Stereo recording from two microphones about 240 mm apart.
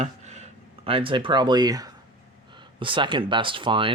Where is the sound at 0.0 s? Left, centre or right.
Right.